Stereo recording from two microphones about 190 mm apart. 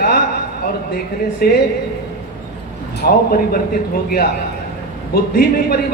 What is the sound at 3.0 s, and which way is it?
Speech, 55° left (ahead or behind).